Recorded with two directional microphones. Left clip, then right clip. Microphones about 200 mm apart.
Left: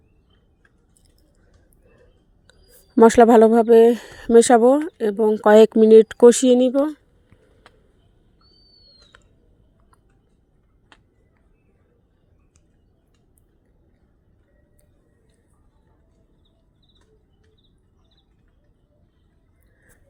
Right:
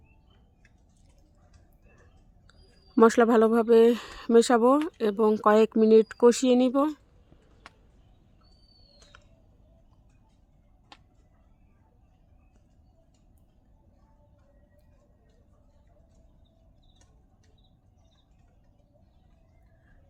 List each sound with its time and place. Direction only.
2.5 s speech: 20° left (ahead or behind)
5.4 s speech: 20° left (ahead or behind)
6.7 s speech: 5° left (ahead or behind)
9.1 s typing: 15° left (ahead or behind)